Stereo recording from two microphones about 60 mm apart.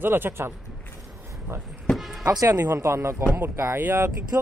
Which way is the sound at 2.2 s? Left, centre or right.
Right.